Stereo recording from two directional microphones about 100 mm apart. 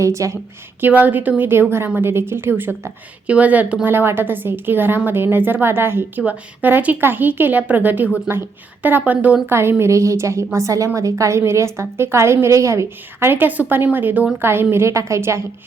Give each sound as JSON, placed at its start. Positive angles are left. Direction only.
{"t": 0.0, "sound": "a woman's voice", "side_deg": -30}
{"t": 0.8, "sound": "a woman's voice", "side_deg": -20}